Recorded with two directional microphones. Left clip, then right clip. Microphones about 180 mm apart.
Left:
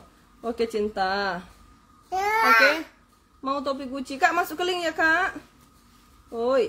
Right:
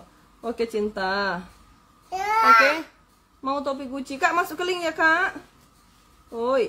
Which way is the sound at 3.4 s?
5° right (ahead or behind).